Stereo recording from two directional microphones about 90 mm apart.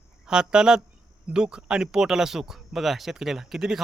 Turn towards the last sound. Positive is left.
turn(degrees=-5)  # may be behind; listen again after turning